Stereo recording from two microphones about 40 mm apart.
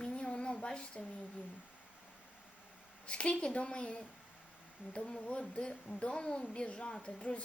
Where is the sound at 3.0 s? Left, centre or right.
Left.